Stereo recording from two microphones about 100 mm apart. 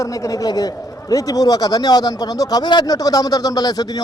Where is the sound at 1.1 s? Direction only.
40° left (ahead or behind).